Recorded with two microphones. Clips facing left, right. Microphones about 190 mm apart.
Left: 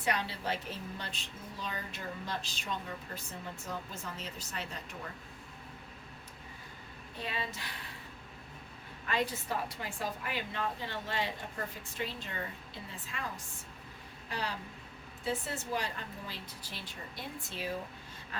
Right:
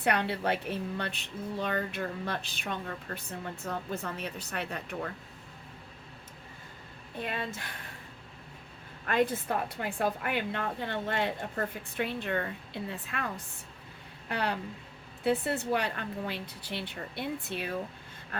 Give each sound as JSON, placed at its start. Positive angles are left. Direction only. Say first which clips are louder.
{"t": 0.0, "sound": "speech", "louder": "right 6 dB", "side_deg": -60}
{"t": 7.2, "sound": "speech", "louder": "right 4 dB", "side_deg": -55}
{"t": 9.0, "sound": "speech", "louder": "right 6 dB", "side_deg": -50}